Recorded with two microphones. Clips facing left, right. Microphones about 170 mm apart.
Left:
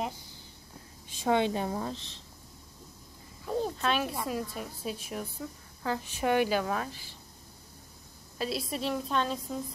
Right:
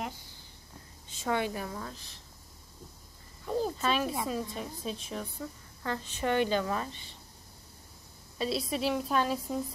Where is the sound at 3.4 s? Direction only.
Centre (ahead or behind).